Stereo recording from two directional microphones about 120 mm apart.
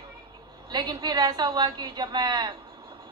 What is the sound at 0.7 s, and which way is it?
A woman's voice, 35° right (ahead or behind).